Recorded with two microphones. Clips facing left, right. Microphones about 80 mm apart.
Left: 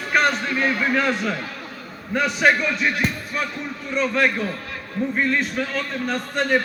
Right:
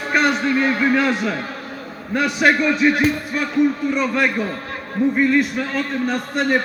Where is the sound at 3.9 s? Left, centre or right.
Centre.